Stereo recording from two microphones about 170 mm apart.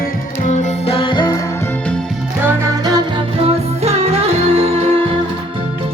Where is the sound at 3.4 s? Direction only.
40° right (ahead or behind).